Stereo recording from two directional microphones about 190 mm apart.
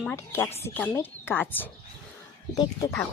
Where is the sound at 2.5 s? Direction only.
20° left (ahead or behind).